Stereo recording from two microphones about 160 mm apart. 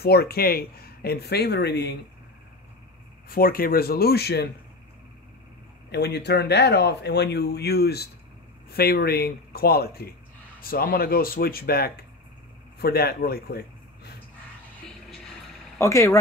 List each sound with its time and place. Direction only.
0.0 s speech: 75° left (ahead or behind)
3.3 s speech: 70° left (ahead or behind); by 4.5 s 85° left
5.9 s speech: 90° left; by 13.6 s 75° left (ahead or behind)
15.8 s speech: 20° left (ahead or behind)